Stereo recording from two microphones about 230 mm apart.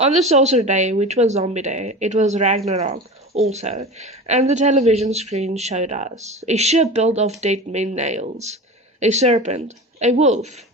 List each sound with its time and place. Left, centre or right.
0.3 s speech: right